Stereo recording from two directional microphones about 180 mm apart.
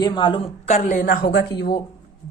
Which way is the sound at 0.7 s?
45° left (ahead or behind).